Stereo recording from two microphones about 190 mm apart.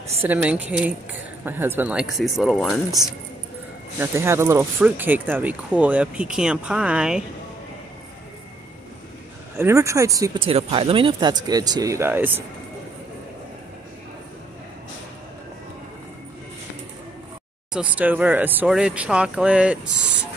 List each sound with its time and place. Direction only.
0.2 s speech: 10° right (ahead or behind)
4.0 s speech: 15° right (ahead or behind)
9.6 s speech: 15° right (ahead or behind)
17.7 s speech: 5° right (ahead or behind)